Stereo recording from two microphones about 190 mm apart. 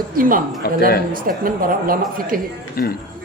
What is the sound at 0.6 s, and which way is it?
Speech, 55° left (ahead or behind).